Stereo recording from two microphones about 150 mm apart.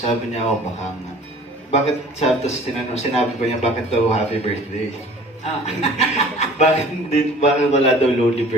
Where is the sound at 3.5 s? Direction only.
45° left (ahead or behind).